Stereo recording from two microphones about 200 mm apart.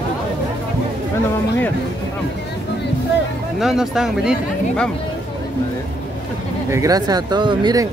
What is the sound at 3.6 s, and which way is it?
Speech, centre (ahead or behind).